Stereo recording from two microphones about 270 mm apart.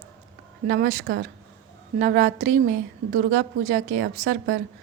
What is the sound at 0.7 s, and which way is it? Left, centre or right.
A woman's voice, right.